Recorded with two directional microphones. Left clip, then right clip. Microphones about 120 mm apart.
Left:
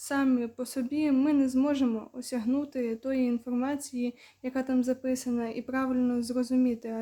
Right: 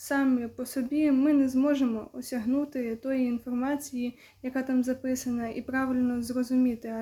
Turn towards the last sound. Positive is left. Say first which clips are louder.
# even
turn(degrees=20)  # may be behind; listen again after turning